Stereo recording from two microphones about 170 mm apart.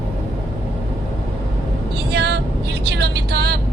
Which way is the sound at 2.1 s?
75° right (ahead or behind).